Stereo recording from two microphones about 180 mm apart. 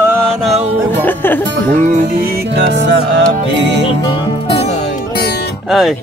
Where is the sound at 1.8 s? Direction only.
40° right (ahead or behind).